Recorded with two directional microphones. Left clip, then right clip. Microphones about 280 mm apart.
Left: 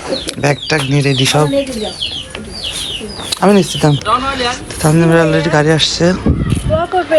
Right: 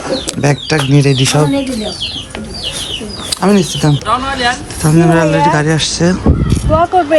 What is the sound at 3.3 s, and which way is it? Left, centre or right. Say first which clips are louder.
Speech: left 2 dB; centre.